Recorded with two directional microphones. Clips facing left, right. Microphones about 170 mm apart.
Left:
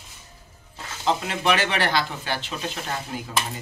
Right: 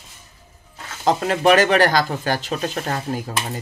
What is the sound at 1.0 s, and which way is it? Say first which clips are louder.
Speech: right 7 dB; 45° right (ahead or behind).